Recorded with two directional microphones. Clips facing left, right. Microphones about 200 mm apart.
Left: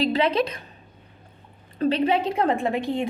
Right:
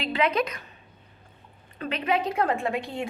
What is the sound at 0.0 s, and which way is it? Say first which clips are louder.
Speech: left 4 dB; 35° left (ahead or behind).